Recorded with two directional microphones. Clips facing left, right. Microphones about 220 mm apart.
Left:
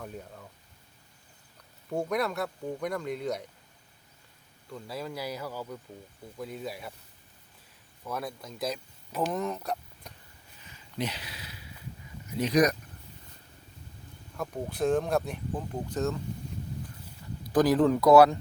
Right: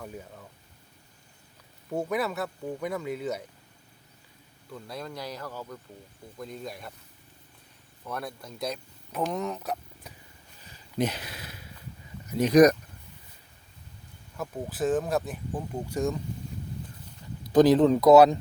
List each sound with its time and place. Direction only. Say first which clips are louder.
0.0 s speech: even; centre (ahead or behind)
1.9 s speech: even; 5° right (ahead or behind)
4.7 s speech: left 1 dB; 5° left (ahead or behind)
8.0 s speech: even; centre (ahead or behind)
10.6 s a sound: right 6 dB; 40° right (ahead or behind)
12.4 s speech: right 6 dB; 50° right (ahead or behind)
14.3 s speech: even; 5° right (ahead or behind)
17.5 s speech: right 4 dB; 20° right (ahead or behind)